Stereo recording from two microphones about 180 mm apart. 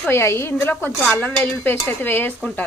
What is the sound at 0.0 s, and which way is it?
Speech, 15° left (ahead or behind).